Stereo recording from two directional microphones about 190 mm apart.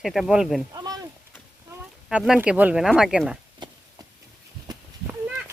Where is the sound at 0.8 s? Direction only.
20° right (ahead or behind).